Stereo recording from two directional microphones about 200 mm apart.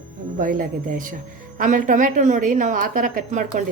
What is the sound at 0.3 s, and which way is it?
A woman's voice, 40° right (ahead or behind).